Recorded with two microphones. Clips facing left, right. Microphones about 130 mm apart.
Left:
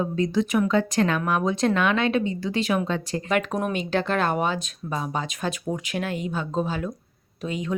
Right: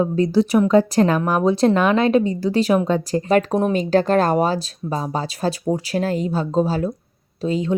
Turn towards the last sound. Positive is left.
turn(degrees=-30)  # may be behind; listen again after turning